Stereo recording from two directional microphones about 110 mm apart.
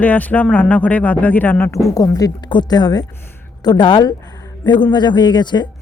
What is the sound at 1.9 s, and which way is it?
A woman's voice, 30° left (ahead or behind).